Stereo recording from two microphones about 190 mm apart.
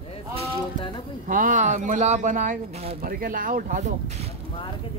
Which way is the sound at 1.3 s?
45° right (ahead or behind).